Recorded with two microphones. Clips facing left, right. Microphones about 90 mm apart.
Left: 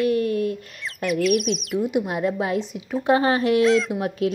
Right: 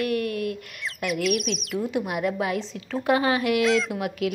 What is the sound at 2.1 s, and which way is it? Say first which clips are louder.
A woman's voice: left 2 dB; 25° left (ahead or behind).